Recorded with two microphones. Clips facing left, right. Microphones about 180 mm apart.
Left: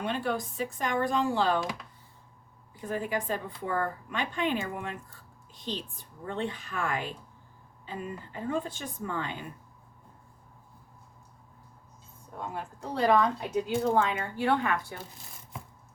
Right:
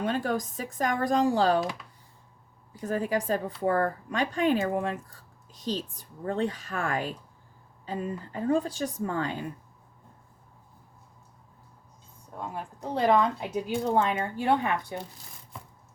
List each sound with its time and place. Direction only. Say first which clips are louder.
0.0 s speech: right 3 dB; 40° right (ahead or behind)
2.7 s speech: right 4 dB; 40° right (ahead or behind)
12.8 s speech: right 1 dB; 20° right (ahead or behind)